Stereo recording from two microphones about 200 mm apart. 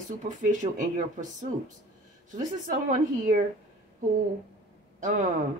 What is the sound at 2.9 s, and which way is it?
Speech, 40° right (ahead or behind).